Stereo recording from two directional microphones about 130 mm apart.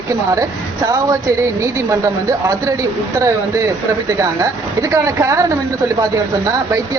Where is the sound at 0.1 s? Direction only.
25° right (ahead or behind).